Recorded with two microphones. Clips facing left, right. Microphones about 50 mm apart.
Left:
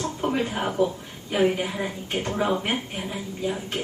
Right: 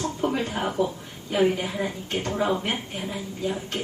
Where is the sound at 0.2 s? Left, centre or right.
Centre.